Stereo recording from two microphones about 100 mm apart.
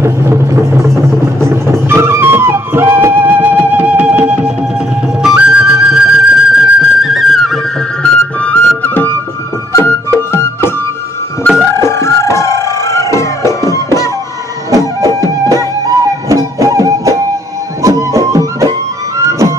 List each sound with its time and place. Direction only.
0.0 s music: 30° right (ahead or behind); by 10.7 s 25° left (ahead or behind)
11.8 s music: 30° left (ahead or behind)
15.0 s music: 35° right (ahead or behind)